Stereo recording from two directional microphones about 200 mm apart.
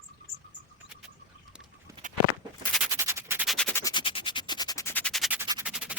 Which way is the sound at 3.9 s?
25° left (ahead or behind).